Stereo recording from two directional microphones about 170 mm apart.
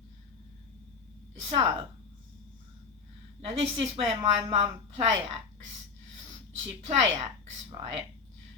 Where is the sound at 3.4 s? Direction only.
40° right (ahead or behind).